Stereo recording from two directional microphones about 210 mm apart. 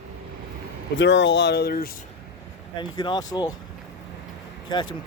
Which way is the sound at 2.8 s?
20° left (ahead or behind).